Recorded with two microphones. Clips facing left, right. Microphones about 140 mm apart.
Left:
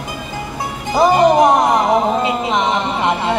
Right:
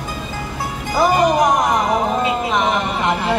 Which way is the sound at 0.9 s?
25° left (ahead or behind).